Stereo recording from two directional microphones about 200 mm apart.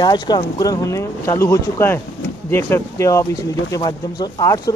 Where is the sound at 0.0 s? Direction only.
20° left (ahead or behind).